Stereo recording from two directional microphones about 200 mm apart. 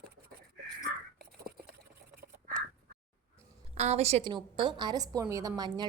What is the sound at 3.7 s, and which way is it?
A woman's voice, 35° right (ahead or behind).